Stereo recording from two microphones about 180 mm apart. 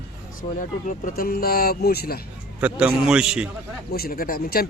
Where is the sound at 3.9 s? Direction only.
55° left (ahead or behind).